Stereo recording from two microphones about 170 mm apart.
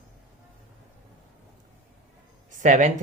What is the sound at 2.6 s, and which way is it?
Speech, 45° right (ahead or behind).